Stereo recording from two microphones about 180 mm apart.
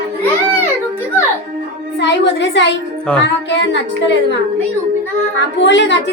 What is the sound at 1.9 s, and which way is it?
A woman's voice, 80° left.